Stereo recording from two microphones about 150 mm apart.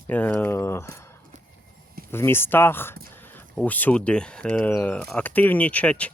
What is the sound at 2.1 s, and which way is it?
Speech, 15° left (ahead or behind).